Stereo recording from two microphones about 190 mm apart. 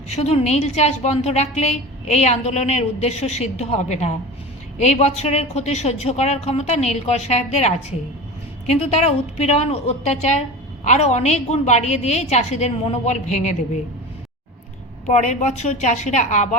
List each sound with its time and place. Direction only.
0.2 s a woman's voice: 35° left (ahead or behind)
15.0 s a woman's voice: 40° left (ahead or behind)